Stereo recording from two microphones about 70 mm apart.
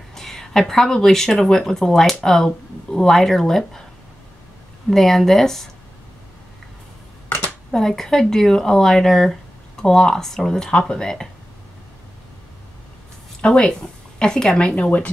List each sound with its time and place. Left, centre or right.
0.1 s speech: centre
4.8 s speech: centre
7.7 s speech: centre
13.4 s a woman's voice: centre